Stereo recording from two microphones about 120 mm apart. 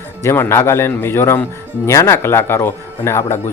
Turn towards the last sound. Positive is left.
turn(degrees=20)  # may be behind; listen again after turning